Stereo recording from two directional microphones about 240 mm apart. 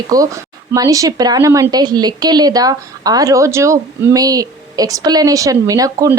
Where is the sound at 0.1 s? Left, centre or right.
Centre.